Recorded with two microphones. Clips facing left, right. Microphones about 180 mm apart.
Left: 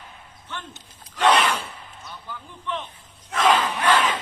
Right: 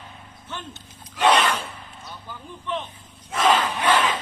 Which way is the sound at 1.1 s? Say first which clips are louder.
Even; 10° right (ahead or behind).